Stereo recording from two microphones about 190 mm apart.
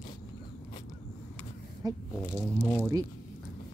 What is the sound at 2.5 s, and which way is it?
Speech, 15° left (ahead or behind).